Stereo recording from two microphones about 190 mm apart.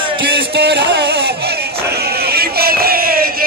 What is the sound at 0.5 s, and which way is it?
Music, 60° right (ahead or behind).